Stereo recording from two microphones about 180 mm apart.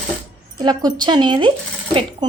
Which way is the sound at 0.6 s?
20° right (ahead or behind).